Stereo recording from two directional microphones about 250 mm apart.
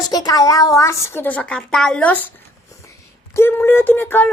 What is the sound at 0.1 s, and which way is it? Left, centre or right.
Speech, centre.